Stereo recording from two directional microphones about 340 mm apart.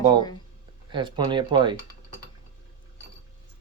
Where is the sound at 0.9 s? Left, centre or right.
Centre.